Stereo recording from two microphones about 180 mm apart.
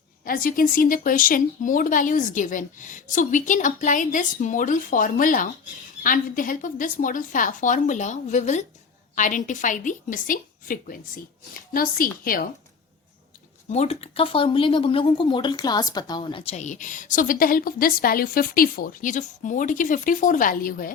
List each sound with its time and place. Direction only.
0.3 s speech: 50° left (ahead or behind)
13.7 s speech: 35° left (ahead or behind); by 20.9 s 50° left (ahead or behind)